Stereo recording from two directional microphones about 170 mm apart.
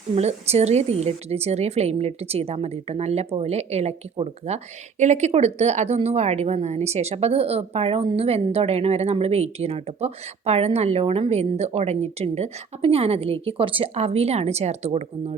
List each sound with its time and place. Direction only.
0.2 s a woman's voice: 40° right (ahead or behind)